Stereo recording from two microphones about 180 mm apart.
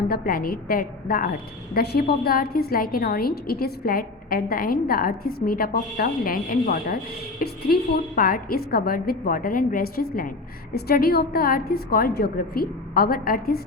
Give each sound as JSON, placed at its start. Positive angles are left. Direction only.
{"t": 0.1, "sound": "a woman's voice", "side_deg": 55}